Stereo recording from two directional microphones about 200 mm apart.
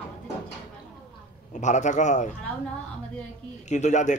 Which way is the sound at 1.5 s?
35° left (ahead or behind).